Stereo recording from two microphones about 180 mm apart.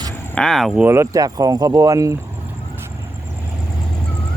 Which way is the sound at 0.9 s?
15° right (ahead or behind).